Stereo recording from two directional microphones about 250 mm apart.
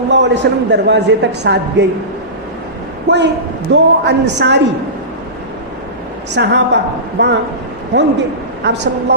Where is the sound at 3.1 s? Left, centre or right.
Right.